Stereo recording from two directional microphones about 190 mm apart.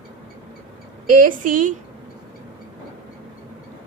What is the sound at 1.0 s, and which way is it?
Speech, 45° right (ahead or behind).